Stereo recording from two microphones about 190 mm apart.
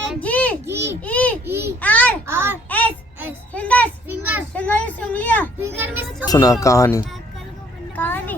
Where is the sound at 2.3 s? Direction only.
10° right (ahead or behind).